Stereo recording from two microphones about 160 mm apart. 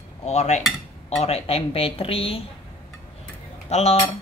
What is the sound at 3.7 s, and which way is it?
Speech, 40° left (ahead or behind).